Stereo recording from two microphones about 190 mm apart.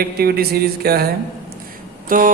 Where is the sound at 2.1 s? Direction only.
45° right (ahead or behind).